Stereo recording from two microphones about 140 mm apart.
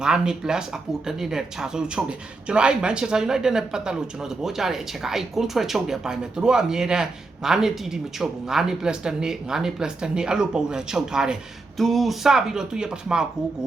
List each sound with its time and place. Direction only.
0.0 s speech: 5° right (ahead or behind)